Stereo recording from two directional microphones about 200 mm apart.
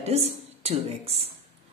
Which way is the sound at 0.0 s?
30° right (ahead or behind).